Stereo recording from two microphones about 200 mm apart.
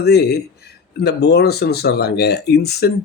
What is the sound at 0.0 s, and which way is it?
Speech, 55° left (ahead or behind).